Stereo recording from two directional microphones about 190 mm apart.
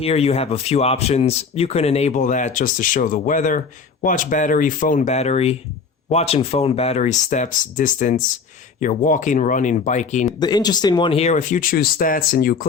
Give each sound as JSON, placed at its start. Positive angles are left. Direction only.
{"t": 0.0, "sound": "speech", "side_deg": 30}
{"t": 10.2, "sound": "speech", "side_deg": 20}